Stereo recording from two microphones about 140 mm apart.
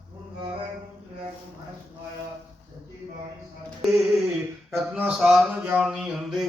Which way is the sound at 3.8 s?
Centre (ahead or behind).